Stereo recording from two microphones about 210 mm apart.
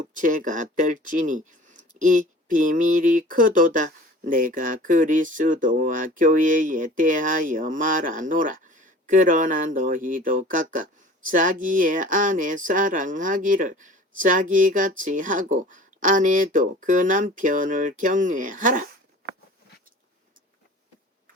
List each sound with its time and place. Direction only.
0.2 s speech: 40° right (ahead or behind)